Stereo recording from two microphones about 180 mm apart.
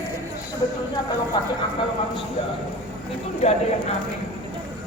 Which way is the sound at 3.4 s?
35° left (ahead or behind).